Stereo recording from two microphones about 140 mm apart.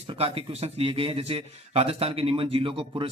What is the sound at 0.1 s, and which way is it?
A man's voice, 45° right (ahead or behind).